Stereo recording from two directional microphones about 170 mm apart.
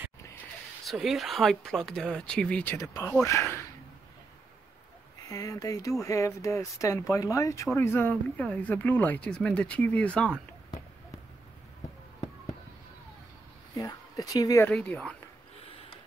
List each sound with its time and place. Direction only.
0.8 s speech: centre (ahead or behind); by 3.6 s 15° left (ahead or behind)
5.3 s speech: 20° left (ahead or behind)
13.7 s speech: 20° left (ahead or behind)
14.7 s speech: 5° left (ahead or behind)